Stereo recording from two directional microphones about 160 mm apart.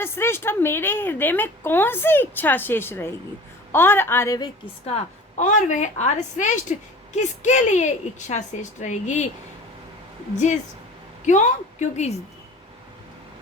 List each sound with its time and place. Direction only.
0.0 s a woman's voice: 15° left (ahead or behind)
4.9 s a woman's voice: 45° left (ahead or behind)
11.3 s a woman's voice: 50° left (ahead or behind)